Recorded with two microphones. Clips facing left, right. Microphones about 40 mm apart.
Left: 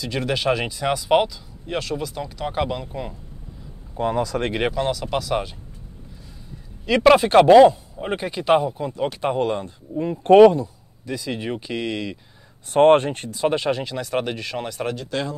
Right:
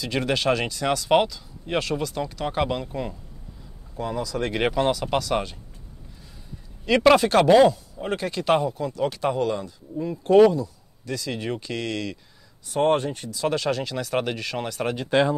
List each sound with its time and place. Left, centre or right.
0.0 s speech: centre
3.9 s speech: left
4.6 s speech: centre
6.9 s speech: centre
7.2 s speech: left
8.7 s speech: left
11.1 s speech: centre
12.7 s speech: left
13.4 s speech: left
13.9 s speech: centre
15.0 s speech: right